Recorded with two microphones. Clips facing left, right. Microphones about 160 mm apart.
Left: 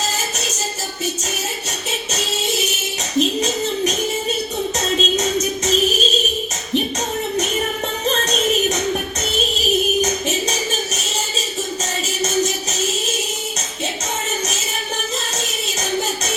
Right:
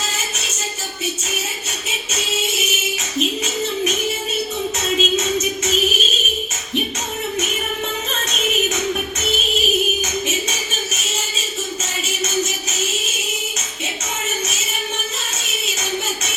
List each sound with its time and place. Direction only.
0.3 s music: 40° left (ahead or behind)
1.9 s music: 35° left (ahead or behind)
8.0 s music: 35° left (ahead or behind)
10.0 s music: 35° left (ahead or behind)